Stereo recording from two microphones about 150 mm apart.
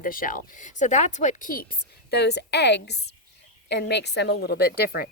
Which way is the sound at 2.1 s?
90° left.